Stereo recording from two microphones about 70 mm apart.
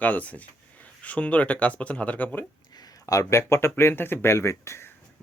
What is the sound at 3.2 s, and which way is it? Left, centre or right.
Speech, left.